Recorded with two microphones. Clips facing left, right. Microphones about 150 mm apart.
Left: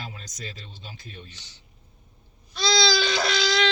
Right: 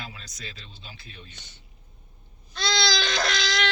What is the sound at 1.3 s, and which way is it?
Speech, 55° right (ahead or behind).